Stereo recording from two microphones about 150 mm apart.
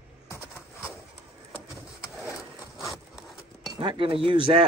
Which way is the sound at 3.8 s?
35° right (ahead or behind).